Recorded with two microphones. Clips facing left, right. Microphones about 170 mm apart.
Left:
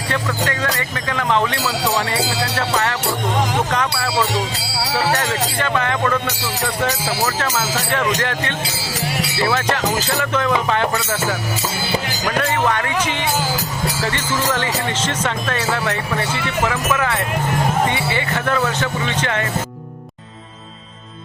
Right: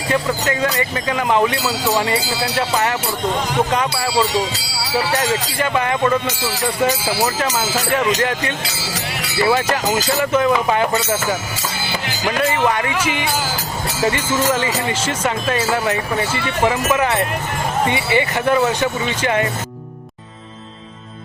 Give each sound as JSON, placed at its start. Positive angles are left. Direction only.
{"t": 0.4, "sound": "speech", "side_deg": -10}
{"t": 5.5, "sound": "speech", "side_deg": -10}
{"t": 12.4, "sound": "speech", "side_deg": -10}
{"t": 16.6, "sound": "speech", "side_deg": -20}